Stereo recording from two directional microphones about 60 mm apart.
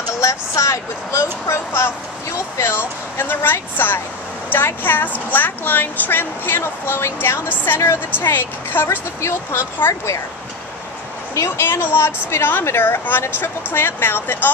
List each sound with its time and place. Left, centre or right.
0.2 s speech: left
2.6 s a woman's voice: left
9.2 s speech: left
11.3 s a woman's voice: left